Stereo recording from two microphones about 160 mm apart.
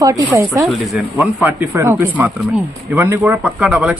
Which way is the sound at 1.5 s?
15° right (ahead or behind).